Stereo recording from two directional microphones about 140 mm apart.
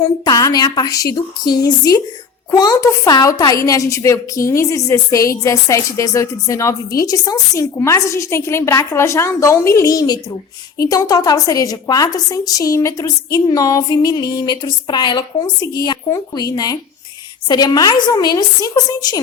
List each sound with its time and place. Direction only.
0.0 s a woman's voice: 25° left (ahead or behind)